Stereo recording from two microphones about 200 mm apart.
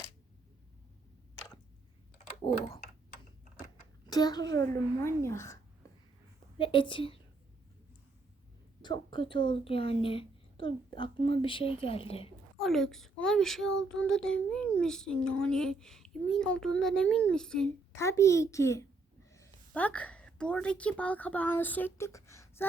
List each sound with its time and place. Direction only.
2.1 s typing: 35° left (ahead or behind)
4.0 s a child's voice: 20° left (ahead or behind)
6.6 s a woman's voice: 25° left (ahead or behind)
8.8 s a woman's voice: 25° left (ahead or behind)
12.5 s a child's voice: centre (ahead or behind)
17.9 s a child's voice: 15° left (ahead or behind)